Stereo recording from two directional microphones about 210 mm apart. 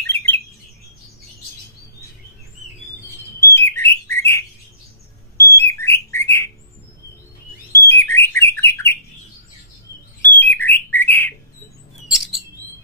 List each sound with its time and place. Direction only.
0.0 s bird: 10° left (ahead or behind)
3.3 s bird: 10° left (ahead or behind)
5.6 s bird: 10° left (ahead or behind)
7.7 s bird: 10° left (ahead or behind)
10.2 s bird: 10° left (ahead or behind)
12.1 s chirp: centre (ahead or behind)